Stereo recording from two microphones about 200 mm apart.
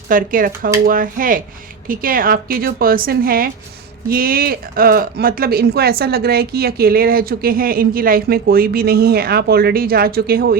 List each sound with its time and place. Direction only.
0.1 s speech: 45° right (ahead or behind)